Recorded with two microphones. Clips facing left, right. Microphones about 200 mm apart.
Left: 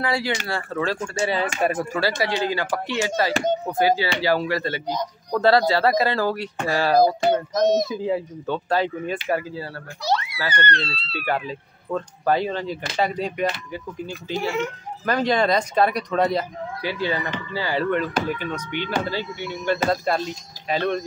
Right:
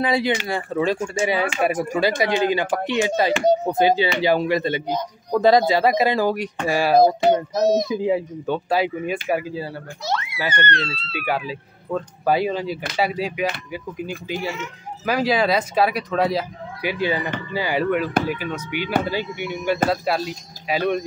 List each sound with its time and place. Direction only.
0.0 s speech: 20° right (ahead or behind); by 7.9 s centre (ahead or behind)
7.9 s speech: 15° right (ahead or behind)
11.2 s speech: 5° right (ahead or behind)
16.8 s speech: 15° right (ahead or behind)